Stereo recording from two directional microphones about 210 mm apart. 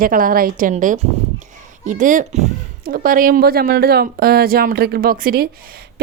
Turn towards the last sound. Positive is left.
turn(degrees=-45)  # may be behind; listen again after turning